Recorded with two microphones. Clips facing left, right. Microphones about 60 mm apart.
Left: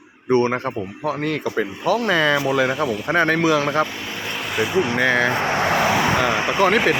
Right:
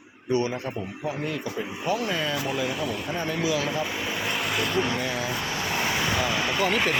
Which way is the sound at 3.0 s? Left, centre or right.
Left.